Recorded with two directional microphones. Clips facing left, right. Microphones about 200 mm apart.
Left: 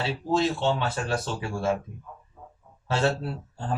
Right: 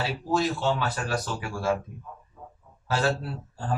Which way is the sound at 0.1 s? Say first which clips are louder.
Left 1 dB; 25° left (ahead or behind).